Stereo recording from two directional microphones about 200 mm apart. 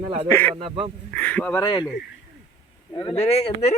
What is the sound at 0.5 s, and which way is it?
Speech, 30° right (ahead or behind).